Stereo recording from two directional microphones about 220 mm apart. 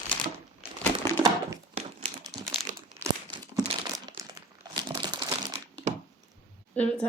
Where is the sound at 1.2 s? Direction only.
15° right (ahead or behind).